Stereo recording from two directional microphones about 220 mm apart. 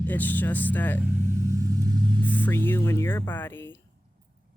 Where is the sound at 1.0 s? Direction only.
15° right (ahead or behind).